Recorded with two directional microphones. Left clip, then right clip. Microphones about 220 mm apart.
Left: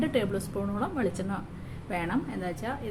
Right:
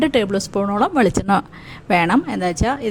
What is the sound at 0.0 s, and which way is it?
A woman's voice, 45° right (ahead or behind).